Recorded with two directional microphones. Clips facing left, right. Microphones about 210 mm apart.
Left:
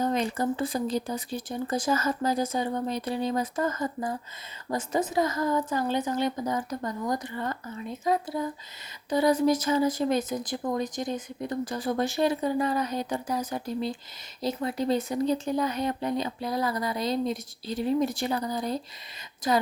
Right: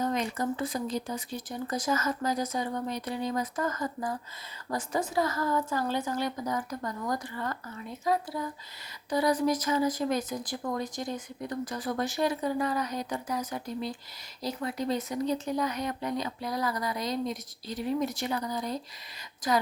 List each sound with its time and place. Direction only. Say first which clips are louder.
0.0 s speech: left 3 dB; 30° left (ahead or behind)